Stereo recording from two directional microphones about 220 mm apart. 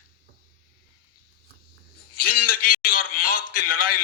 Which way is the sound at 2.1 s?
40° left (ahead or behind).